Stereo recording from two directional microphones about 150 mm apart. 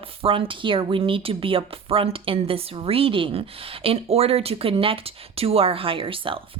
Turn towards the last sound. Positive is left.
turn(degrees=-35)  # may be behind; listen again after turning